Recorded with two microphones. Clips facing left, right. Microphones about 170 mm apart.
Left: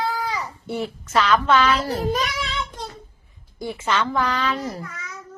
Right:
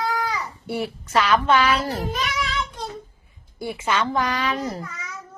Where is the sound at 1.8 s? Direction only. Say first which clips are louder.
Left 3 dB; 40° left (ahead or behind).